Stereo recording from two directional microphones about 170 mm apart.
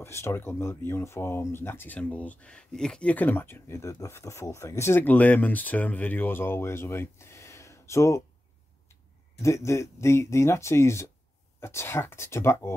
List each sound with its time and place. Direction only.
0.0 s speech: 15° left (ahead or behind)
9.4 s speech: 15° left (ahead or behind)